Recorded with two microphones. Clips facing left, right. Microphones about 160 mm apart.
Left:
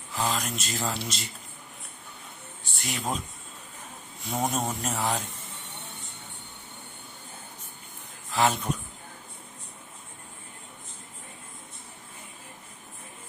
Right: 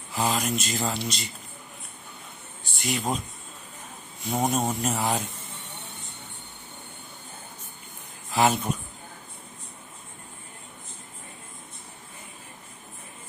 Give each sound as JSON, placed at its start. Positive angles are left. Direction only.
{"t": 0.1, "sound": "speech", "side_deg": -5}
{"t": 2.7, "sound": "speech", "side_deg": 0}
{"t": 4.2, "sound": "speech", "side_deg": 0}
{"t": 8.3, "sound": "speech", "side_deg": -10}